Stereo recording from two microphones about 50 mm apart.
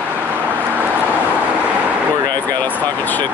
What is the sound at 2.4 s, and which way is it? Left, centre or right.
Speech, left.